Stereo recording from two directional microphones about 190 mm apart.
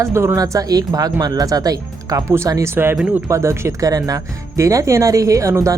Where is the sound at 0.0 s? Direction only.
15° right (ahead or behind).